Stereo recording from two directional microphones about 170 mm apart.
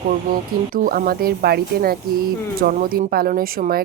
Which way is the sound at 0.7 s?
55° right (ahead or behind).